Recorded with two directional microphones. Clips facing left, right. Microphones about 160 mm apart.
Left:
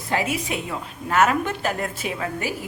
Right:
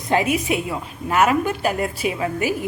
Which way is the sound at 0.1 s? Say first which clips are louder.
Right 5 dB; 15° right (ahead or behind).